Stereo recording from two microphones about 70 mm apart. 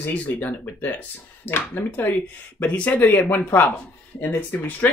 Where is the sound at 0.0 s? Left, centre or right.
Left.